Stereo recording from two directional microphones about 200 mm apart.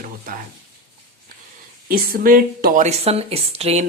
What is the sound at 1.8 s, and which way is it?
Speech, 45° right (ahead or behind).